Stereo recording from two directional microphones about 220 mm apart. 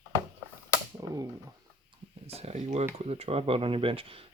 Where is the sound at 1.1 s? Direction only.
15° right (ahead or behind).